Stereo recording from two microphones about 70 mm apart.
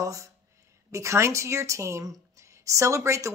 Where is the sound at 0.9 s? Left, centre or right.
Right.